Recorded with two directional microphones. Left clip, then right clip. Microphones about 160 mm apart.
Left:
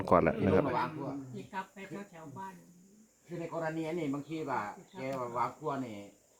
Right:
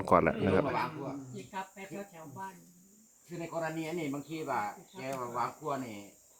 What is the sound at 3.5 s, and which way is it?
Speech, 10° left (ahead or behind).